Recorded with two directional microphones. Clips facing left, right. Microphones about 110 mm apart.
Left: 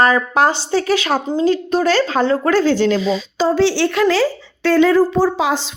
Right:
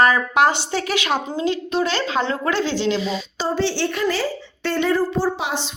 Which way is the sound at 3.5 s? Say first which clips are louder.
Left 6 dB; 90° left.